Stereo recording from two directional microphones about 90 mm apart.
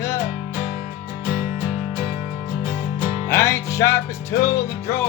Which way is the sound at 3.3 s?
30° left (ahead or behind).